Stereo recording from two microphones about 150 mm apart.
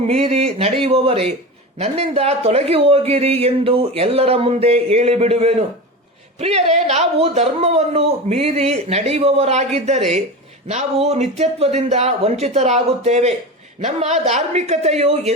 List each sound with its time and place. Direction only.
0.1 s a man's voice: 45° right (ahead or behind)